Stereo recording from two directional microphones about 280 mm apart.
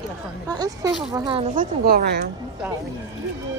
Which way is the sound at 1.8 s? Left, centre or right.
Right.